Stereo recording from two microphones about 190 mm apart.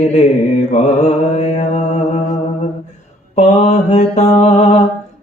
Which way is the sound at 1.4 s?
35° left (ahead or behind).